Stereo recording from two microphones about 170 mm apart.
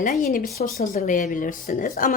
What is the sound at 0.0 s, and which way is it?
A woman's voice, 55° left (ahead or behind).